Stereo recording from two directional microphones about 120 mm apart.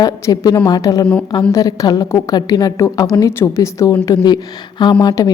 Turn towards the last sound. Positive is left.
turn(degrees=35)  # may be behind; listen again after turning